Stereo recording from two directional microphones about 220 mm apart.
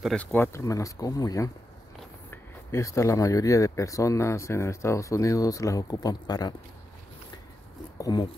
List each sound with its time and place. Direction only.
0.0 s speech: 5° left (ahead or behind)
8.0 s speech: 20° left (ahead or behind)